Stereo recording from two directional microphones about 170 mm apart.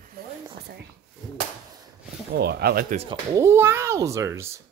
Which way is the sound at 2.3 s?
70° right (ahead or behind).